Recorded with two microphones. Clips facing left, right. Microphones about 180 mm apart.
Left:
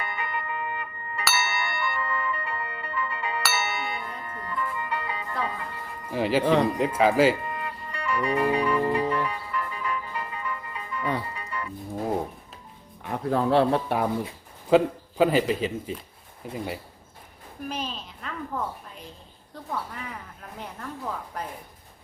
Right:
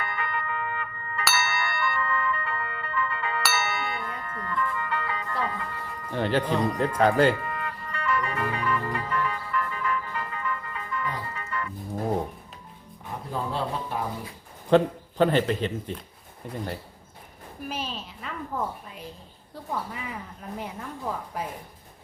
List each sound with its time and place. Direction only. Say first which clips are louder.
0.1 s music: right 1 dB; 20° left (ahead or behind)
1.2 s tubular bells: even; centre (ahead or behind)
2.0 s music: right 2 dB; 15° left (ahead or behind)
3.4 s music: right 1 dB; centre (ahead or behind)
4.2 s music: right 2 dB; 25° left (ahead or behind)
6.1 s speech: left 3 dB; 5° left (ahead or behind)
7.3 s music: even; 20° left (ahead or behind)
13.0 s speech: left 7 dB; 70° left (ahead or behind)
14.7 s speech: even; 5° left (ahead or behind)
17.7 s a sound: left 1 dB; 5° right (ahead or behind)
19.7 s speech: right 1 dB; 5° right (ahead or behind)